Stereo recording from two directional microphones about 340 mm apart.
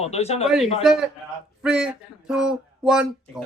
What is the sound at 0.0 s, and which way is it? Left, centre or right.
Speech, centre.